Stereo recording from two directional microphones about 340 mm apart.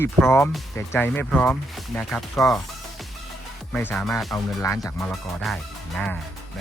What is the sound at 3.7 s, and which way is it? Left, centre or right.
Speech, centre.